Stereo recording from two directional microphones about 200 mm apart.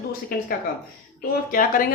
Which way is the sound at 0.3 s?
50° left (ahead or behind).